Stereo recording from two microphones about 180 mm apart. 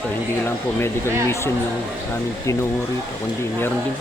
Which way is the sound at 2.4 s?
15° left (ahead or behind).